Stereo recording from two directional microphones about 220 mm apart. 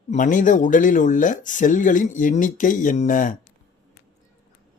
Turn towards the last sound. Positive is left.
turn(degrees=35)  # may be behind; listen again after turning